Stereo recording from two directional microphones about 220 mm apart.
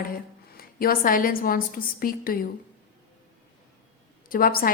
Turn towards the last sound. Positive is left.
turn(degrees=40)  # may be behind; listen again after turning